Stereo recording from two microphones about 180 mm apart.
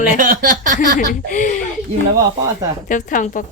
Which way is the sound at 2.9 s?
45° left (ahead or behind).